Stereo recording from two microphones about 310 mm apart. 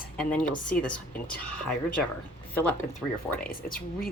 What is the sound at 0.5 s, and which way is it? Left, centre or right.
Speech, left.